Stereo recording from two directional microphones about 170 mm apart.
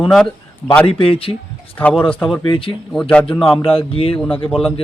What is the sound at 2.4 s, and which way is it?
Speech, 30° left (ahead or behind).